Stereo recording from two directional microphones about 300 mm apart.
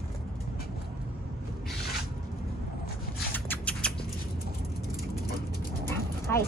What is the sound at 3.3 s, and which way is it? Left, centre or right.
Rodents, centre.